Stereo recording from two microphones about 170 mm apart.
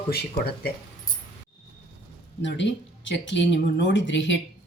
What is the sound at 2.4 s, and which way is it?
Speech, 90° left.